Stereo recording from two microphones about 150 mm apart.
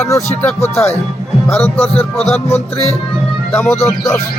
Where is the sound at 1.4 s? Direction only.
15° left (ahead or behind).